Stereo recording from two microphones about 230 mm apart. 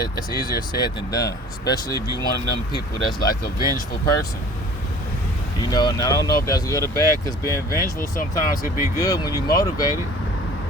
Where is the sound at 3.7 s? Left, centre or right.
Centre.